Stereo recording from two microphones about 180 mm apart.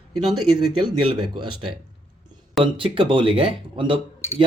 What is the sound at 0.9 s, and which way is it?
Speech, 25° right (ahead or behind).